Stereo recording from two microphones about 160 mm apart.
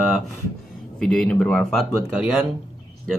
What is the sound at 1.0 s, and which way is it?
Speech, 5° left (ahead or behind).